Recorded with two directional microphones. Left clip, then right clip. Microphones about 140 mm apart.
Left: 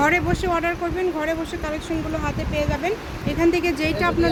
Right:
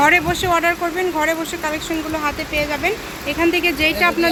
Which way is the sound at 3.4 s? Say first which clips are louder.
Right 3 dB; centre (ahead or behind).